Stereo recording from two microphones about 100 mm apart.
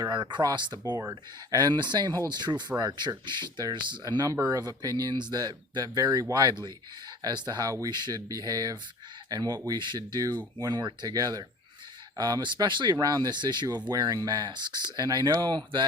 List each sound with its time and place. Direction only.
0.0 s speech: 50° right (ahead or behind)
9.6 s speech: 50° right (ahead or behind)